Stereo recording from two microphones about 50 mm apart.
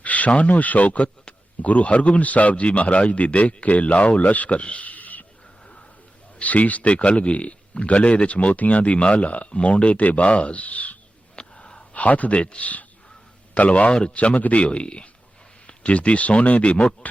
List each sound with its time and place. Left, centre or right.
0.0 s speech: left
6.4 s speech: left
11.3 s a sound: centre
13.5 s speech: left